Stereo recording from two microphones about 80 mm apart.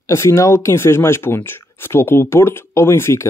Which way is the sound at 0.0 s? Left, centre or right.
Left.